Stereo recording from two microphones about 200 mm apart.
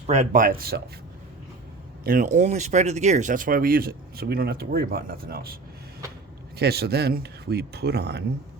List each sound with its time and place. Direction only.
0.1 s speech: 40° right (ahead or behind)
2.0 s speech: 40° right (ahead or behind)
6.6 s speech: 50° right (ahead or behind)